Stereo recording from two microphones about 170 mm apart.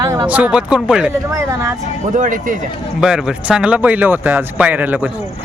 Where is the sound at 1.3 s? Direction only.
15° right (ahead or behind).